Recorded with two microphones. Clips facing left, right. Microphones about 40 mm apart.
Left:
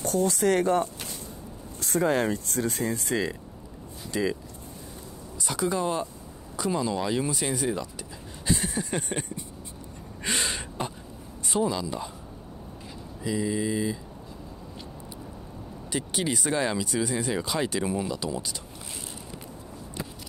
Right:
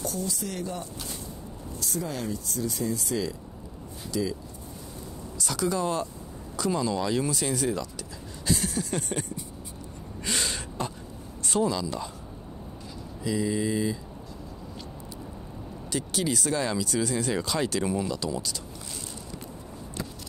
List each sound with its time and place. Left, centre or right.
0.0 s speech: left
5.4 s speech: centre
8.5 s a sound: centre
10.2 s gasp: centre
11.4 s speech: centre
13.2 s speech: centre
15.9 s speech: centre